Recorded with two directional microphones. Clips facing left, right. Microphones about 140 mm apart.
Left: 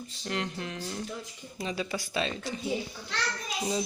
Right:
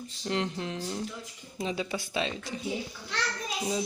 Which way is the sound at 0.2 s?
20° right (ahead or behind).